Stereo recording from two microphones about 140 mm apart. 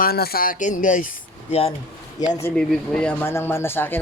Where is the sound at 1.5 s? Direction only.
45° left (ahead or behind).